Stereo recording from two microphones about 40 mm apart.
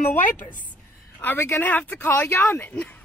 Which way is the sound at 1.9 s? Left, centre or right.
Left.